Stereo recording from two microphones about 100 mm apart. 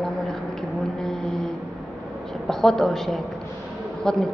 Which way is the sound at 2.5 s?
5° left (ahead or behind).